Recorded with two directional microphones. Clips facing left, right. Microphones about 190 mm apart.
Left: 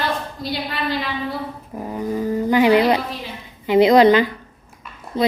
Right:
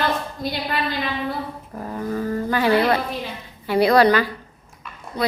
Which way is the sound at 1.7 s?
15° left (ahead or behind).